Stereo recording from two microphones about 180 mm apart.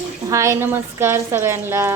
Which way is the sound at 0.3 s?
15° right (ahead or behind).